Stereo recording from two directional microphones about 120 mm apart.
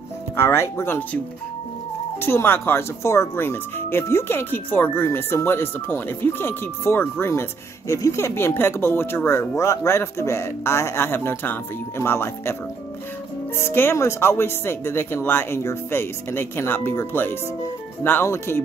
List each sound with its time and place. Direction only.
0.4 s speech: 20° left (ahead or behind)
13.6 s speech: 20° left (ahead or behind)